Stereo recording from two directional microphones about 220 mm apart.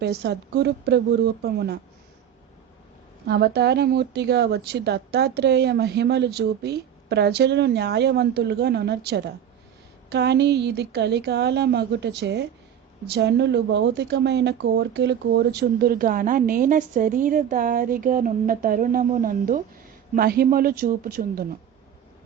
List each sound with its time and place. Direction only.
0.0 s a woman's voice: 50° right (ahead or behind)
3.2 s a woman's voice: 50° right (ahead or behind)